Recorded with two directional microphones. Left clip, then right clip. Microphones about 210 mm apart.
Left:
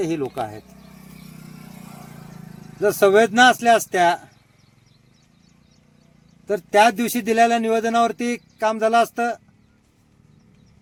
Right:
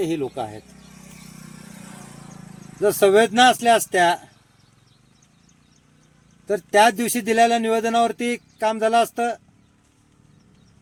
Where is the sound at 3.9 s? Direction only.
20° left (ahead or behind).